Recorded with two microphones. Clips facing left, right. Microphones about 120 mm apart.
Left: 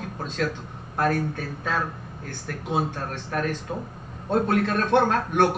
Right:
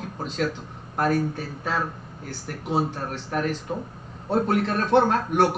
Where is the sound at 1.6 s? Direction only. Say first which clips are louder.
Even; 25° right (ahead or behind).